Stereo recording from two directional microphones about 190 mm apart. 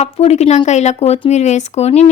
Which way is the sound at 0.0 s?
35° left (ahead or behind).